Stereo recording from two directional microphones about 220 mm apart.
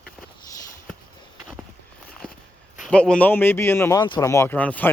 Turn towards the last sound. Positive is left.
turn(degrees=5)  # may be behind; listen again after turning